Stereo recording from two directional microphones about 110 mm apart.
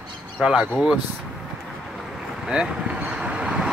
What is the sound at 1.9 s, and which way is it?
Vehicle, 5° right (ahead or behind).